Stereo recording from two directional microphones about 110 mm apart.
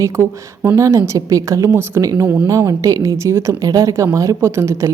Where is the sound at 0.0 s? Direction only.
25° right (ahead or behind).